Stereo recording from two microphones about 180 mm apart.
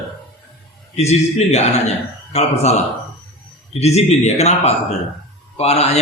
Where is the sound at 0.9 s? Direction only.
35° left (ahead or behind).